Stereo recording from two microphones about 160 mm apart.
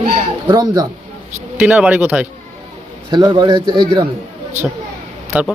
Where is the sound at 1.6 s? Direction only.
10° right (ahead or behind).